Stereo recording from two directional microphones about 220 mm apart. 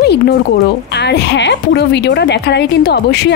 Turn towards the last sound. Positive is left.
turn(degrees=50)  # may be behind; listen again after turning